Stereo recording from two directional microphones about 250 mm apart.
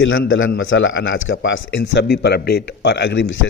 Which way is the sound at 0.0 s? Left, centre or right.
Left.